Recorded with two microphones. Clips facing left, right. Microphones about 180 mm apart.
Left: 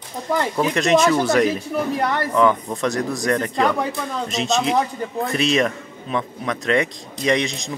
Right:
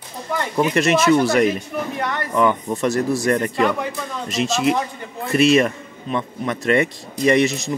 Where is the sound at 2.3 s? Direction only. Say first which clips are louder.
Right 1 dB; 10° right (ahead or behind).